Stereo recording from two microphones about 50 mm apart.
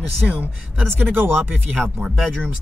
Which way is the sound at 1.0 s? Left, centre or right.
Right.